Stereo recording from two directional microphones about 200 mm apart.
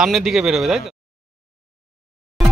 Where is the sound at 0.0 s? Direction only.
5° right (ahead or behind).